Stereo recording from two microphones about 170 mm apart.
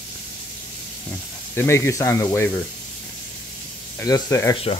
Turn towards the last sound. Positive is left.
turn(degrees=20)  # may be behind; listen again after turning